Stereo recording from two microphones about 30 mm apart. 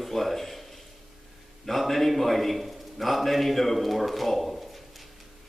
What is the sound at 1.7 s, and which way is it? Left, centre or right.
A man's voice, centre.